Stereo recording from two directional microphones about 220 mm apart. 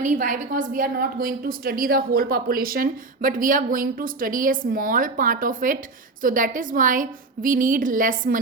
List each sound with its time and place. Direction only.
0.0 s a woman's voice: 35° right (ahead or behind)